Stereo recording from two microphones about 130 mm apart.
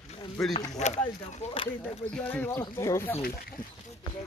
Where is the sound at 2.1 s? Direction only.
15° left (ahead or behind).